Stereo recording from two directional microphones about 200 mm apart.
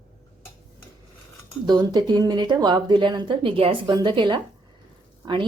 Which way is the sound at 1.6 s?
20° right (ahead or behind).